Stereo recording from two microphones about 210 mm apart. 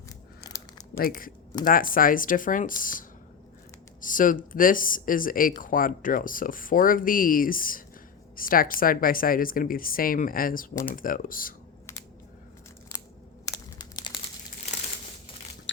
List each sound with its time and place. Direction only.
0.4 s a sound: 15° left (ahead or behind)
0.9 s speech: 45° left (ahead or behind)
4.0 s speech: 40° left (ahead or behind)
13.4 s crushing: 15° left (ahead or behind)
14.7 s crumpling: 30° left (ahead or behind)